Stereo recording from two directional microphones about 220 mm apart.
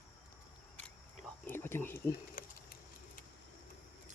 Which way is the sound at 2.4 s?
40° left (ahead or behind).